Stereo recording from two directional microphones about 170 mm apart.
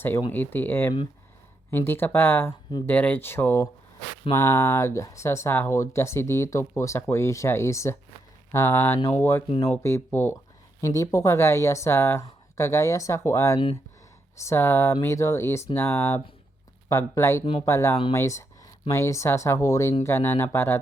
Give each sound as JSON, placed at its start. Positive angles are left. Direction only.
{"t": 0.3, "sound": "speech", "side_deg": 10}